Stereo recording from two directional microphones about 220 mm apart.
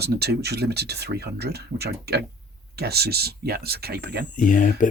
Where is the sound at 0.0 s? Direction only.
45° right (ahead or behind).